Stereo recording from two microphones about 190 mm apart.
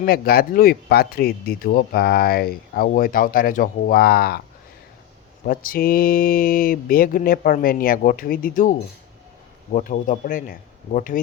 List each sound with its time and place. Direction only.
0.0 s speech: 55° left (ahead or behind)
5.5 s speech: 50° left (ahead or behind)
9.7 s speech: 45° left (ahead or behind)